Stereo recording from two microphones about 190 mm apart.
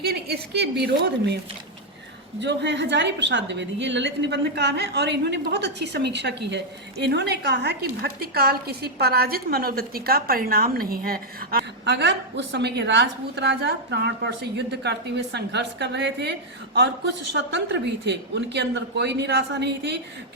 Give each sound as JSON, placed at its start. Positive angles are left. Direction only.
{"t": 0.0, "sound": "a woman's voice", "side_deg": -55}
{"t": 2.4, "sound": "a woman's voice", "side_deg": -65}